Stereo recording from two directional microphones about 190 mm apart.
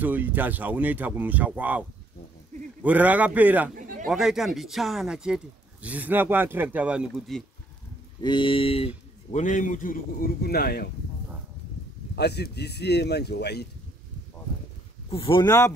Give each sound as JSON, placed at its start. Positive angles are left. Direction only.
{"t": 0.0, "sound": "speech", "side_deg": -10}
{"t": 3.7, "sound": "a sound", "side_deg": -45}
{"t": 4.1, "sound": "speech", "side_deg": 0}
{"t": 8.2, "sound": "speech", "side_deg": 25}
{"t": 12.2, "sound": "speech", "side_deg": 60}
{"t": 15.0, "sound": "speech", "side_deg": 30}